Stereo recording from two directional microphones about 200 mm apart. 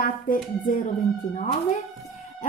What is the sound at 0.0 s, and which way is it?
Speech, 40° left (ahead or behind).